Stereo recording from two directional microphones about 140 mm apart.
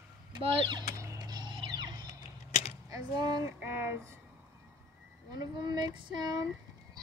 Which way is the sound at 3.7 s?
20° right (ahead or behind).